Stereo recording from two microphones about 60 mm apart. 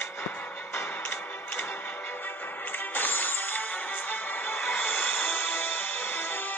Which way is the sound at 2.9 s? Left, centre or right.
Left.